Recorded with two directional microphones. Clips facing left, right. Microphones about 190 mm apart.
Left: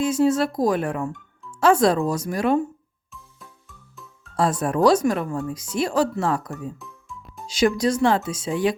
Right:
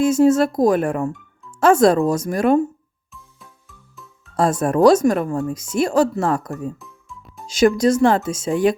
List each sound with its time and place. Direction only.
0.0 s speech: 45° right (ahead or behind)
3.7 s music: centre (ahead or behind)
4.4 s speech: 45° right (ahead or behind)
6.7 s music: centre (ahead or behind)
7.4 s speech: 45° right (ahead or behind)